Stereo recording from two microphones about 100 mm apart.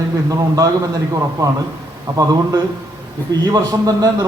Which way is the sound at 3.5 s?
40° right (ahead or behind).